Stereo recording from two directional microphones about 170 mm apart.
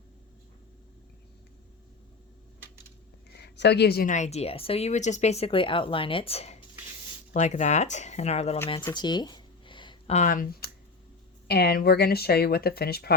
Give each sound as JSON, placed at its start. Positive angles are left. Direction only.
{"t": 3.3, "sound": "speech", "side_deg": 80}
{"t": 4.1, "sound": "speech", "side_deg": 40}
{"t": 8.9, "sound": "a sound", "side_deg": 25}
{"t": 10.2, "sound": "speech", "side_deg": 50}
{"t": 11.4, "sound": "speech", "side_deg": 70}